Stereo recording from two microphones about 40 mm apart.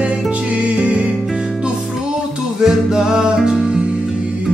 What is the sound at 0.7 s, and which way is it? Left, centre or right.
Music, right.